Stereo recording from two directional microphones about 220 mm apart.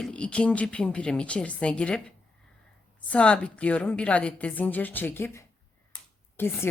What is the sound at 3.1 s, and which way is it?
A woman's voice, 5° left (ahead or behind).